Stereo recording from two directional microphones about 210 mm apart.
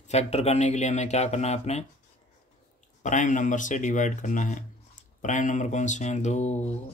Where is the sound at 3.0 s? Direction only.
35° left (ahead or behind).